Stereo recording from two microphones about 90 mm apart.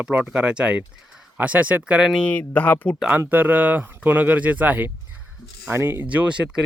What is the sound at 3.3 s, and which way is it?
Speech, 20° right (ahead or behind).